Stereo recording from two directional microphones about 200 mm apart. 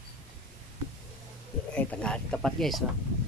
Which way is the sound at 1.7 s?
5° left (ahead or behind).